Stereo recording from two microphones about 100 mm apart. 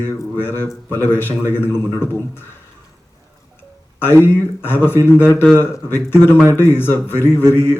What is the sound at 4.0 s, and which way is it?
A man's voice, 20° left (ahead or behind).